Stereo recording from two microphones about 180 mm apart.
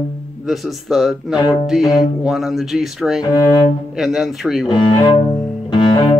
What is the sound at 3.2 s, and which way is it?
Music, 20° left (ahead or behind).